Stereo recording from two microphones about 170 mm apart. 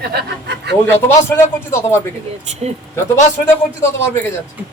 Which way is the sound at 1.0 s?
15° left (ahead or behind).